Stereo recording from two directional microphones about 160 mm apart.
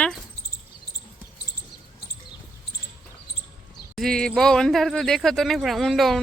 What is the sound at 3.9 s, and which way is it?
Speech, 5° left (ahead or behind).